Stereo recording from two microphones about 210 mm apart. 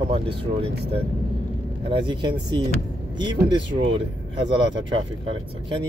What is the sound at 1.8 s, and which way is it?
Speech, 25° right (ahead or behind).